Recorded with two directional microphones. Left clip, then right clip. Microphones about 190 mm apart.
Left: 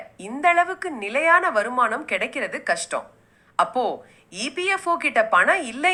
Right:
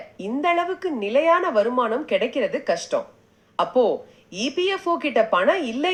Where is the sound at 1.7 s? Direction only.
15° left (ahead or behind).